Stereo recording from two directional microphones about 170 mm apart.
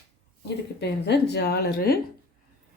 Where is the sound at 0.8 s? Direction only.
75° left (ahead or behind).